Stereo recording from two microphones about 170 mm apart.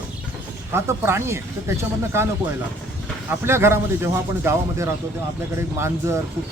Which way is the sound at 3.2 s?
15° right (ahead or behind).